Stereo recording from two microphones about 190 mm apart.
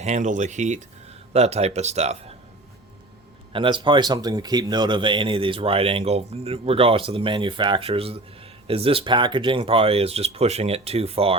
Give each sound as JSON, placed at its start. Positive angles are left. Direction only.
{"t": 0.0, "sound": "speech", "side_deg": -40}
{"t": 3.5, "sound": "speech", "side_deg": -25}